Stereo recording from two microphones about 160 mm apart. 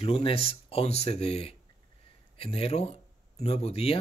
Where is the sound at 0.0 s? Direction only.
35° left (ahead or behind).